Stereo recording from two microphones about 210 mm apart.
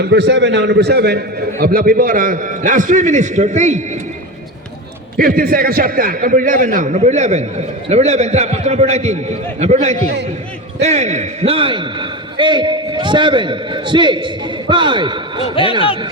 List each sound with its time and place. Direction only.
0.1 s a man's voice: 55° right (ahead or behind); by 3.8 s 35° right (ahead or behind)
5.1 s a man's voice: 45° right (ahead or behind); by 15.4 s 20° right (ahead or behind)